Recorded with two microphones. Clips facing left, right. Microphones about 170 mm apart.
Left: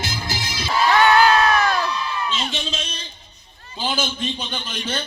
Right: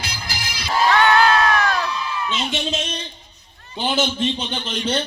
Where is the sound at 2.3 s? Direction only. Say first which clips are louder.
Right 3 dB; 55° right (ahead or behind).